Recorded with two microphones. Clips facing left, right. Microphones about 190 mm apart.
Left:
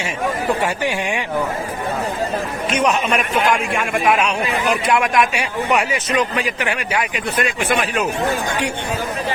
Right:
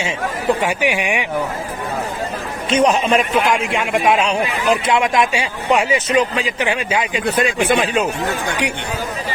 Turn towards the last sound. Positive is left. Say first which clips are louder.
# right 4 dB
turn(degrees=-30)  # may be behind; listen again after turning